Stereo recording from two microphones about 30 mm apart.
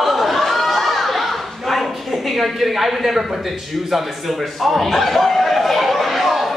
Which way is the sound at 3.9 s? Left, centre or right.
Centre.